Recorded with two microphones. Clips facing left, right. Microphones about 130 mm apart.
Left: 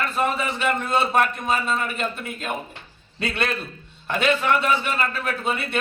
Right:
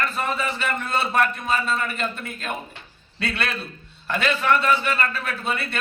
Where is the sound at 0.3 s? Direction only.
20° left (ahead or behind).